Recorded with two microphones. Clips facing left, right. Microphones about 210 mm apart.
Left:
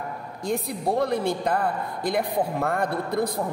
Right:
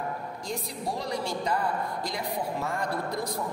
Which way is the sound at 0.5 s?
55° left (ahead or behind).